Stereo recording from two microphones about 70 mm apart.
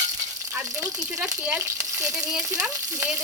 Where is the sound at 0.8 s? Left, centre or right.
Right.